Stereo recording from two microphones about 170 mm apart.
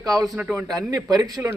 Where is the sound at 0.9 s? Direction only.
20° right (ahead or behind).